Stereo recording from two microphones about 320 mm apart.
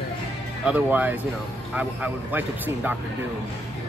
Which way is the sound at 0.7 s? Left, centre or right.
Centre.